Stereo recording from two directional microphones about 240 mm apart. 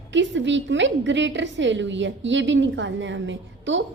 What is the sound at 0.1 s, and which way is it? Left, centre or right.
A woman's voice, right.